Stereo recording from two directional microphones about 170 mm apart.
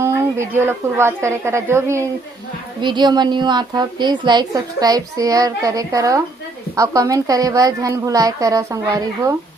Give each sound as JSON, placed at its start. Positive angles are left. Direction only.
{"t": 0.0, "sound": "a woman's voice", "side_deg": -15}
{"t": 2.8, "sound": "a woman's voice", "side_deg": -25}